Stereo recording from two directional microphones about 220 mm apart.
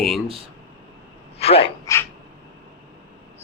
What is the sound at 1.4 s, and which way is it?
Speech, 25° left (ahead or behind).